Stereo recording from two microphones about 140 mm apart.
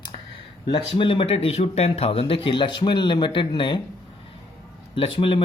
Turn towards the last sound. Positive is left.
turn(degrees=40)  # may be behind; listen again after turning